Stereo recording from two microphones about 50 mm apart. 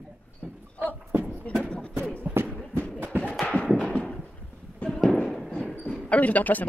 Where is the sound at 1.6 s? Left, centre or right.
Left.